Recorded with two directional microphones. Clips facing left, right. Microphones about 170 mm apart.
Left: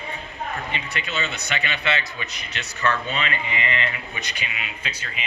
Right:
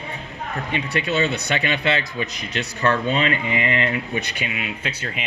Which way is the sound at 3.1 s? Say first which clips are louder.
Right 6 dB; 40° right (ahead or behind).